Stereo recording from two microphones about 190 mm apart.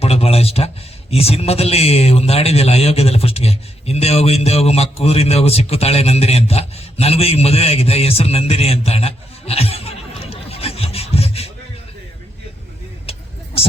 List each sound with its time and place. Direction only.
0.0 s a sound: 30° left (ahead or behind)
1.1 s a man's voice: 30° left (ahead or behind)
13.1 s vehicle: 30° left (ahead or behind)